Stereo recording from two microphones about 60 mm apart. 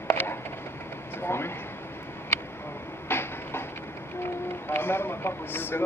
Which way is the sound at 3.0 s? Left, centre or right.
Left.